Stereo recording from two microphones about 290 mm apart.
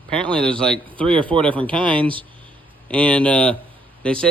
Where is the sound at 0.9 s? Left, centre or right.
Centre.